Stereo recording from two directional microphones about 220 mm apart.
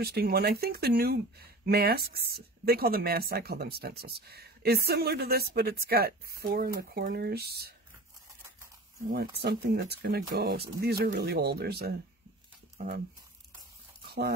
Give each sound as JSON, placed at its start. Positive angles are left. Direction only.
{"t": 0.0, "sound": "speech", "side_deg": -45}
{"t": 9.1, "sound": "speech", "side_deg": -45}
{"t": 14.0, "sound": "a sound", "side_deg": -45}